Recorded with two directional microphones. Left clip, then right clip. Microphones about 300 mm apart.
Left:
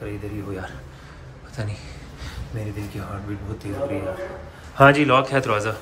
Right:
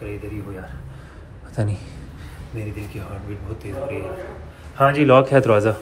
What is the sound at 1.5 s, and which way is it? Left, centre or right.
Speech, centre.